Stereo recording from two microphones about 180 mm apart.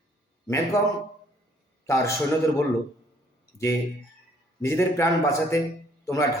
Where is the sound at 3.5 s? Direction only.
60° left (ahead or behind).